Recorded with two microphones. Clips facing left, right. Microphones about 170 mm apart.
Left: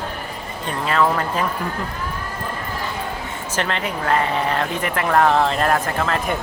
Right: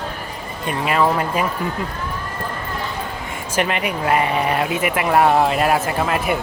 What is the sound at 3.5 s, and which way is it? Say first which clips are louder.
Speech: right 3 dB; 15° right (ahead or behind).